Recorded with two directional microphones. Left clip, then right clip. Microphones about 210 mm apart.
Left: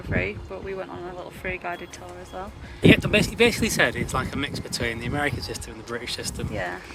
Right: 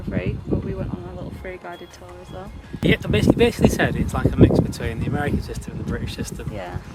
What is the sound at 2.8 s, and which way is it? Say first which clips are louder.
Speech: left 1 dB; 15° right (ahead or behind).